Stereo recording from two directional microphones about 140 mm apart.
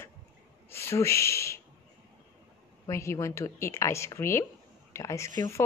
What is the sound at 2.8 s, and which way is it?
A woman's voice, 20° left (ahead or behind).